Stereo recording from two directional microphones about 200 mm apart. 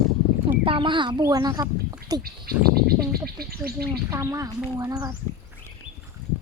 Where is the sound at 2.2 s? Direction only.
50° right (ahead or behind).